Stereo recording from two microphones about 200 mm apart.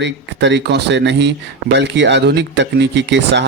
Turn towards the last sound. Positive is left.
turn(degrees=-60)  # may be behind; listen again after turning